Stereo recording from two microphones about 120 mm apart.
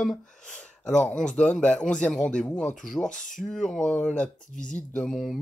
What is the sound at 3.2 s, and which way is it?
Speech, 90° left.